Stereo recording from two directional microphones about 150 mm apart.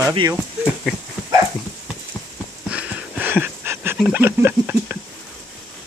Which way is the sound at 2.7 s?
10° right (ahead or behind).